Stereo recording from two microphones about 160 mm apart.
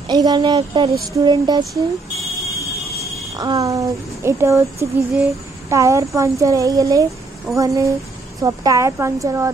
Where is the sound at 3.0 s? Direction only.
20° right (ahead or behind).